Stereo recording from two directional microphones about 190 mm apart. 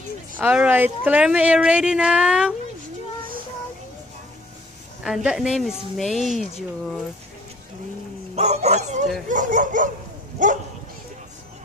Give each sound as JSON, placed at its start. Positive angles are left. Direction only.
{"t": 0.4, "sound": "speech", "side_deg": -5}
{"t": 5.0, "sound": "speech", "side_deg": 0}
{"t": 8.4, "sound": "speech", "side_deg": -35}